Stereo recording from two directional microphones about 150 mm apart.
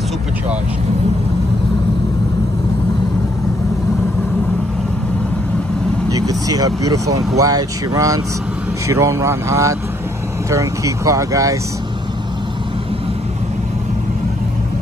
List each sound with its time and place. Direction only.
6.1 s speech: 25° right (ahead or behind)